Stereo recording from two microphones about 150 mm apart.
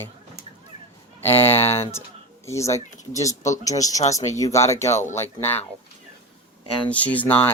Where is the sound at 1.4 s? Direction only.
15° left (ahead or behind).